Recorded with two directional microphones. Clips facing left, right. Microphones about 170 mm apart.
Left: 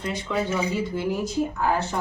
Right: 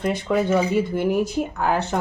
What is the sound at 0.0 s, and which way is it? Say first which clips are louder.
Speech: right 6 dB; 55° right (ahead or behind).